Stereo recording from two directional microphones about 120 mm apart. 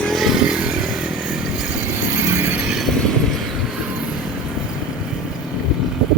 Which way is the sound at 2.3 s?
20° right (ahead or behind).